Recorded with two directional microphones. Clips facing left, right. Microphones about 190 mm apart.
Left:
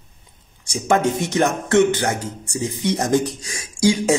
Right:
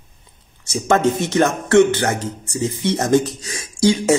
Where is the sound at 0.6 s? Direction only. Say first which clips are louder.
Right 2 dB; 10° left (ahead or behind).